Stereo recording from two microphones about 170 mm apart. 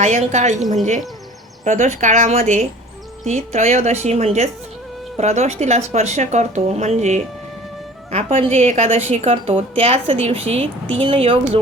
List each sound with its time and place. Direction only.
0.0 s speech: 45° right (ahead or behind)
1.6 s a woman's voice: 45° right (ahead or behind)